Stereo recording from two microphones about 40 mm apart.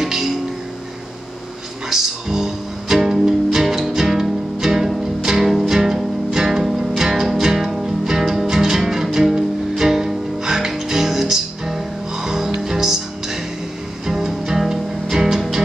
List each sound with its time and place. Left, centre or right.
0.0 s music: centre
1.9 s music: centre